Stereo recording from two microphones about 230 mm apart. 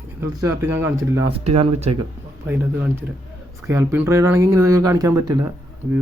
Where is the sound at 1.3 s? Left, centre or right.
Right.